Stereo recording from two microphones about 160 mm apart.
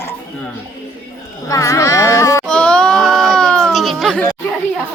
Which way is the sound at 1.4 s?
20° left (ahead or behind).